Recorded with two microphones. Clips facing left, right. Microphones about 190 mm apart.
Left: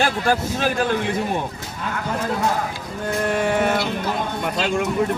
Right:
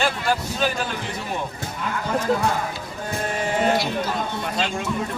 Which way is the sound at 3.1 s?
65° left (ahead or behind).